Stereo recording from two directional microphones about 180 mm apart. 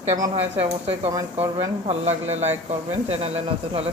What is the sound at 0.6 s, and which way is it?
Speech, 35° right (ahead or behind).